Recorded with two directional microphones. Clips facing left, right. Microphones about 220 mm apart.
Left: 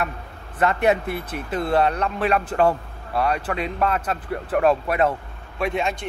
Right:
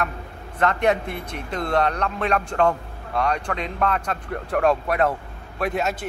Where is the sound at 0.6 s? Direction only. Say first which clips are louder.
Left 1 dB; 10° left (ahead or behind).